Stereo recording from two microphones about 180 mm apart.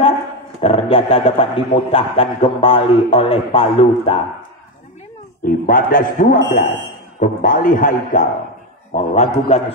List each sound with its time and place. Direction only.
0.6 s a man's voice: 30° left (ahead or behind)
5.4 s a man's voice: 50° left (ahead or behind)